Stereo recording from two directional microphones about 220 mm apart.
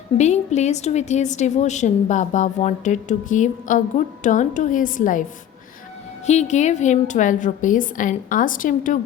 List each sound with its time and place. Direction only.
0.2 s a woman's voice: 30° left (ahead or behind)
6.2 s a woman's voice: 30° left (ahead or behind)